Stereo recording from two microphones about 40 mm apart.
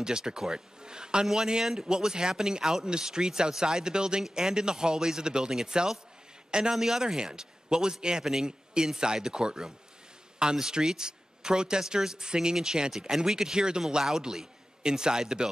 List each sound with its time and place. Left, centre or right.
0.0 s speech: centre